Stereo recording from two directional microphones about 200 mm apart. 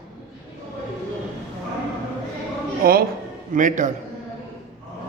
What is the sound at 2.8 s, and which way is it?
A man's voice, 45° right (ahead or behind).